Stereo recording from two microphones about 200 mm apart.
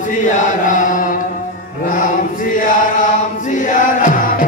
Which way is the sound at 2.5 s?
40° left (ahead or behind).